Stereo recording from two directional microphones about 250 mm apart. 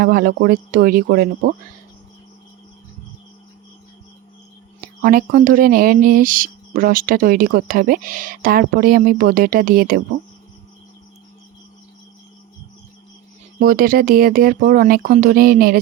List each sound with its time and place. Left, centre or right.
0.0 s speech: right
5.0 s speech: right
13.6 s speech: right